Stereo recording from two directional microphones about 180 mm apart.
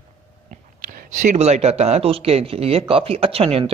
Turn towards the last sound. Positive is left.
turn(degrees=-30)  # may be behind; listen again after turning